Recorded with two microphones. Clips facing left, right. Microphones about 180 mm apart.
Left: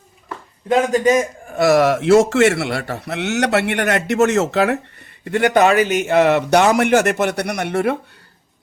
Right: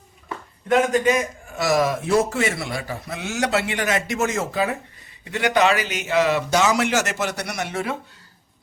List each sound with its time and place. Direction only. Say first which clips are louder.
0.7 s a man's voice: left 3 dB; 35° left (ahead or behind)
1.5 s a man's voice: left 7 dB; 60° left (ahead or behind); by 4.8 s 75° left (ahead or behind)
5.2 s a man's voice: left 5 dB; 55° left (ahead or behind)